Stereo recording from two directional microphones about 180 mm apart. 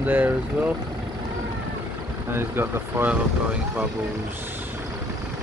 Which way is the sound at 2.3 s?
15° right (ahead or behind).